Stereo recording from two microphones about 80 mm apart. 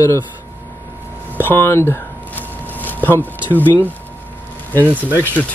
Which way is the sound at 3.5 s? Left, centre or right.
Left.